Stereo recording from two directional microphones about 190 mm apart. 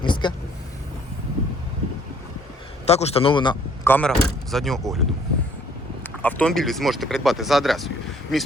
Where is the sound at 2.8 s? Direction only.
35° left (ahead or behind).